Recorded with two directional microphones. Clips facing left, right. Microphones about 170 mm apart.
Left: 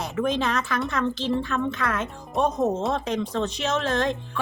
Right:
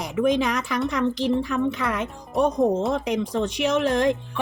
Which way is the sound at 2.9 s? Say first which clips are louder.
Right 2 dB; 10° right (ahead or behind).